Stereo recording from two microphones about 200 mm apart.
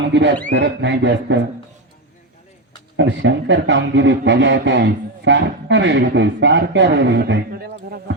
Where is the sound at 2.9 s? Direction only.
60° right (ahead or behind).